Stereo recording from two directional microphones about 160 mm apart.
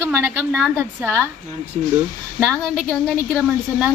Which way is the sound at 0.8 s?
15° right (ahead or behind).